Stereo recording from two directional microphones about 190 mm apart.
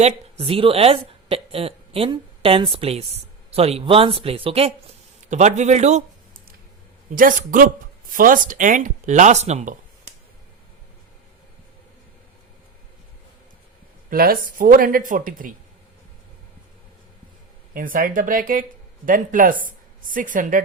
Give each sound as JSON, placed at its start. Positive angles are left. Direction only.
{"t": 0.0, "sound": "a woman's voice", "side_deg": -30}
{"t": 7.2, "sound": "speech", "side_deg": -45}
{"t": 14.1, "sound": "speech", "side_deg": -50}
{"t": 17.7, "sound": "speech", "side_deg": -45}